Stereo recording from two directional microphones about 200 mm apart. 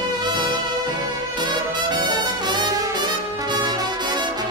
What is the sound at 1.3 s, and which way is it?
Brass instrument, 20° right (ahead or behind).